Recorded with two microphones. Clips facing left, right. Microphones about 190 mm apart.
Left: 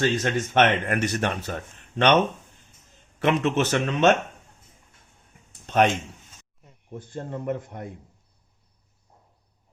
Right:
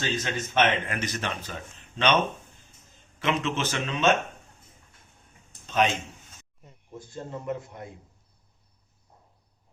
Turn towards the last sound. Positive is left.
turn(degrees=55)  # may be behind; listen again after turning